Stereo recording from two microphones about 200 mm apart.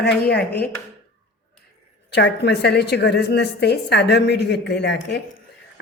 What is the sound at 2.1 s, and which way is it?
A woman's voice, 55° left (ahead or behind).